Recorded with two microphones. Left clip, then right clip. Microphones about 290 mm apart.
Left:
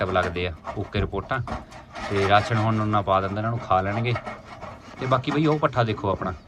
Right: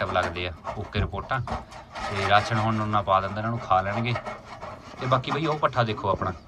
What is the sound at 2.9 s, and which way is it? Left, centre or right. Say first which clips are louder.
Speech: even; centre.